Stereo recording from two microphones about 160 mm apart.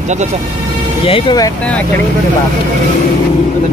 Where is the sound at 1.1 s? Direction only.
35° left (ahead or behind).